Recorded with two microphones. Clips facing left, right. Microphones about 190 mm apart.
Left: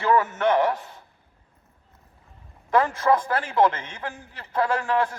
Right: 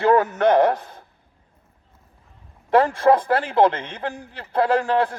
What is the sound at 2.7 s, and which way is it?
A man's voice, 35° right (ahead or behind).